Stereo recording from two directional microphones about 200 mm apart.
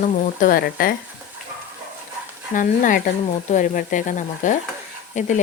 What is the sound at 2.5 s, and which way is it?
Speech, 40° left (ahead or behind).